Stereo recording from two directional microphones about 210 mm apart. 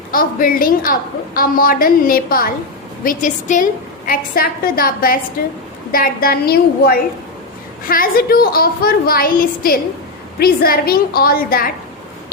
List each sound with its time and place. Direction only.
0.1 s a woman's voice: 45° left (ahead or behind)